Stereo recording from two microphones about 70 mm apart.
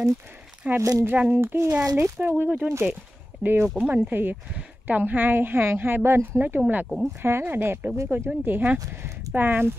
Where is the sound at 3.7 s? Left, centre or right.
Right.